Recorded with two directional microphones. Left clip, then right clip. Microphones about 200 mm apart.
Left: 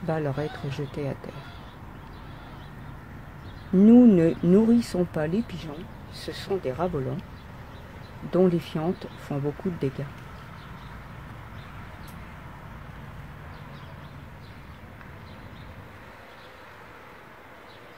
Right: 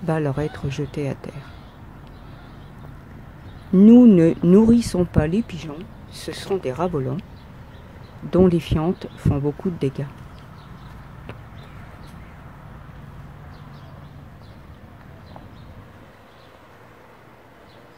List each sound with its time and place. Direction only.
0.0 s speech: 20° right (ahead or behind)
3.7 s speech: 15° right (ahead or behind)
8.3 s speech: 20° right (ahead or behind)